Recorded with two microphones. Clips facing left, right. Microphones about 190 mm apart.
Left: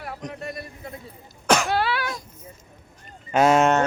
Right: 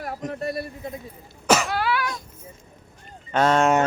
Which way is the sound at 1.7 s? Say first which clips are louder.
Left 1 dB; 25° left (ahead or behind).